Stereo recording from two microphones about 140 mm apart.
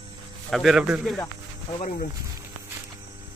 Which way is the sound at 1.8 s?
65° left (ahead or behind).